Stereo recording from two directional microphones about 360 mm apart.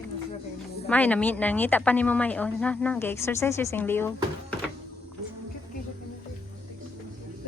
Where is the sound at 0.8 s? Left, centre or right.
Centre.